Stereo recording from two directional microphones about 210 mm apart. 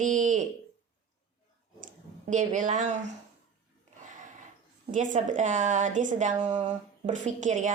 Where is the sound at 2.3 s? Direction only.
35° right (ahead or behind).